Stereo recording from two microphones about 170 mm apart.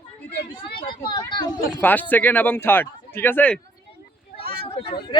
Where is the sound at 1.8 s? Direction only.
10° left (ahead or behind).